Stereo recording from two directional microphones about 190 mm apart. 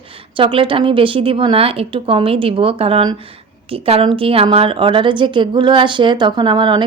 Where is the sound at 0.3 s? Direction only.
25° right (ahead or behind).